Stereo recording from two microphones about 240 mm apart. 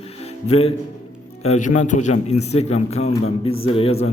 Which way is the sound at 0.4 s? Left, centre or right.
Left.